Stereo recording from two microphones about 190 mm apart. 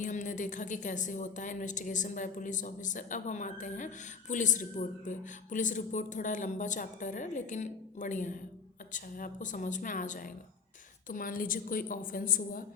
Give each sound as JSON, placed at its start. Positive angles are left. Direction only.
{"t": 0.0, "sound": "a woman's voice", "side_deg": 40}